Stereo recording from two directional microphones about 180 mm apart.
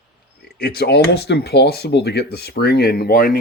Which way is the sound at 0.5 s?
60° left (ahead or behind).